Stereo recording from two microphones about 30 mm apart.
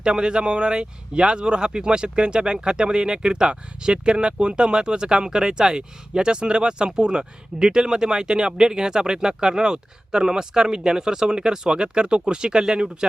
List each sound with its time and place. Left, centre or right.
0.0 s speech: right